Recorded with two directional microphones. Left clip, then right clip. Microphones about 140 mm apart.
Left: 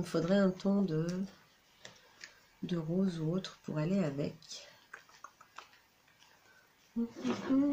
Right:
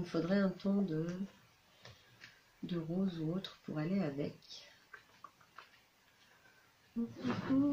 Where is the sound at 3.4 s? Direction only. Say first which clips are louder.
Left 4 dB; 20° left (ahead or behind).